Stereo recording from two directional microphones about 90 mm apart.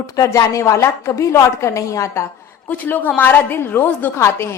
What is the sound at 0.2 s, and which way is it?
A woman's voice, 40° left (ahead or behind).